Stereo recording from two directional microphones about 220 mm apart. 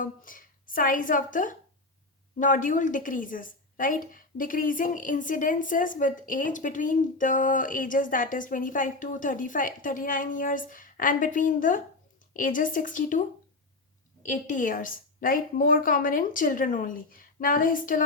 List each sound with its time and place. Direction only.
0.0 s a woman's voice: 40° left (ahead or behind)